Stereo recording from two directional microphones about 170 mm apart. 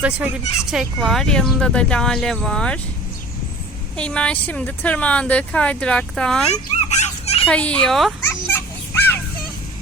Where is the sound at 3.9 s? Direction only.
5° left (ahead or behind).